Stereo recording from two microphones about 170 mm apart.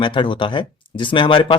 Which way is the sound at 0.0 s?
30° left (ahead or behind).